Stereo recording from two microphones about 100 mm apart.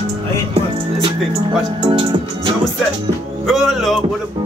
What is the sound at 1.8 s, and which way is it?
Speech, 60° right (ahead or behind).